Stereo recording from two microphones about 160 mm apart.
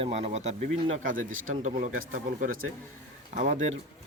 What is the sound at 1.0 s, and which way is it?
Speech, 55° right (ahead or behind).